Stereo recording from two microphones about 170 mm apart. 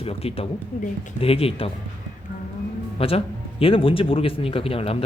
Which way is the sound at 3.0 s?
35° left (ahead or behind).